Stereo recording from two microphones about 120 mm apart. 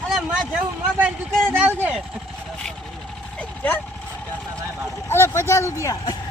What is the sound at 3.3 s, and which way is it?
Vehicle, 15° left (ahead or behind).